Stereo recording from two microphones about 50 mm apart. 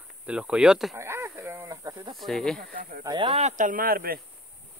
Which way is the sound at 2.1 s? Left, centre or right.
Centre.